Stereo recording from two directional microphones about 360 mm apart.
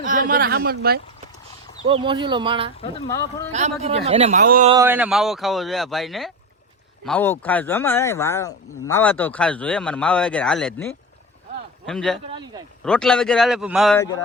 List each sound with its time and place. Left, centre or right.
0.0 s a man's voice: right
1.8 s speech: centre
2.8 s speech: centre
3.5 s a man's voice: centre
4.8 s speech: centre
11.9 s speech: centre
12.2 s speech: centre
12.8 s speech: centre